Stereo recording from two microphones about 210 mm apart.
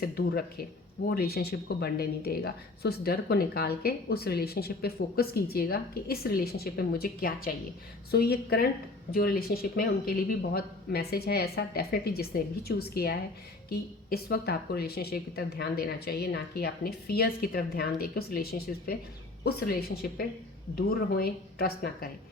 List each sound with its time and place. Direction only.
0.0 s speech: 50° left (ahead or behind)